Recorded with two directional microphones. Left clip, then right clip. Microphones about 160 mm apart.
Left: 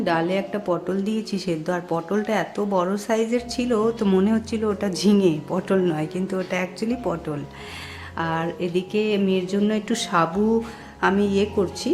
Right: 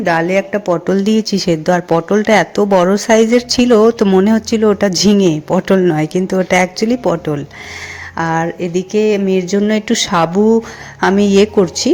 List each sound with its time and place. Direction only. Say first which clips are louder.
0.0 s speech: right 9 dB; 35° right (ahead or behind)